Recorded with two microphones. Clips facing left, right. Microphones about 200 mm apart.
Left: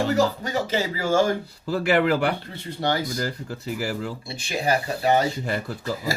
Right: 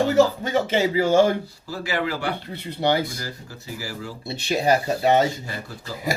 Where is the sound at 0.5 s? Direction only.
20° right (ahead or behind).